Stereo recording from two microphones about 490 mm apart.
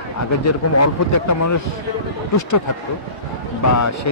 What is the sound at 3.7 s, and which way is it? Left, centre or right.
Speech, left.